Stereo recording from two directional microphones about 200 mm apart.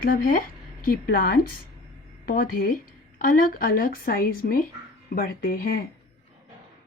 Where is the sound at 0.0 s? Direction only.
45° left (ahead or behind).